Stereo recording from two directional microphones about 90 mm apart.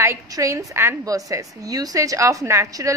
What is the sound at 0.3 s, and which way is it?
A woman's voice, 40° right (ahead or behind).